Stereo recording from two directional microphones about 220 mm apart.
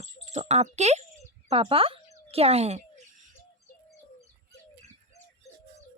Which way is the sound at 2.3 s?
30° right (ahead or behind).